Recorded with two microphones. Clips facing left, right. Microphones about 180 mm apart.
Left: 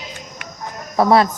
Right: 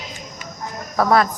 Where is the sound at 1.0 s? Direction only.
30° left (ahead or behind).